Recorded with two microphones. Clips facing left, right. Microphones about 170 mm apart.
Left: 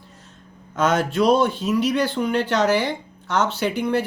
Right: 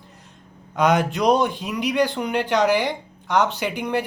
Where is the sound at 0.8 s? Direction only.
15° right (ahead or behind).